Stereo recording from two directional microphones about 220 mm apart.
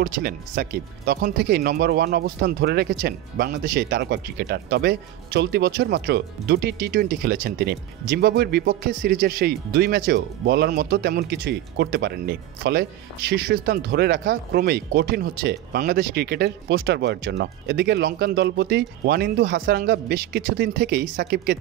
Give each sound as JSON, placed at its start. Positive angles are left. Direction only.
{"t": 0.0, "sound": "speech", "side_deg": -45}